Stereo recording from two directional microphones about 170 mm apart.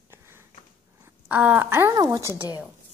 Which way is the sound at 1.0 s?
10° right (ahead or behind).